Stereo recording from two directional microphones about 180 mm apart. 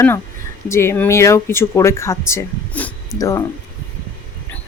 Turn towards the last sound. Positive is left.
turn(degrees=20)  # may be behind; listen again after turning